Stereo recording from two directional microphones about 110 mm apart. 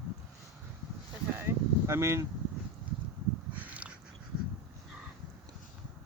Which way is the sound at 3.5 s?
15° right (ahead or behind).